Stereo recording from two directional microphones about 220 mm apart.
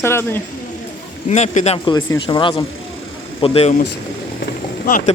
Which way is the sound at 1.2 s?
30° left (ahead or behind).